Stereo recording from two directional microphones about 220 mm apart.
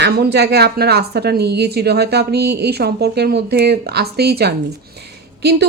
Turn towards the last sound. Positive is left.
turn(degrees=-50)  # may be behind; listen again after turning